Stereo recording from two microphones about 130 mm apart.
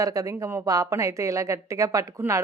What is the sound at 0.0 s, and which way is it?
A woman's voice, 25° right (ahead or behind).